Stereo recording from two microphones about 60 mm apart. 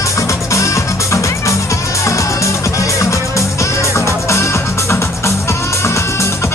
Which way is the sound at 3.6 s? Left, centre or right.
Left.